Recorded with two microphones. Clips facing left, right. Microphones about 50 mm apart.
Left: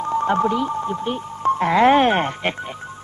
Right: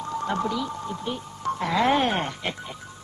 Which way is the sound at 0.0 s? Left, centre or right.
Left.